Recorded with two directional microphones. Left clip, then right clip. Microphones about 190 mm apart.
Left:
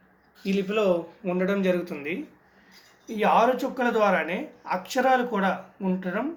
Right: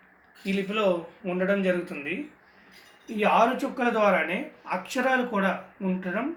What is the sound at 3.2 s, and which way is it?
Speech, 50° left (ahead or behind).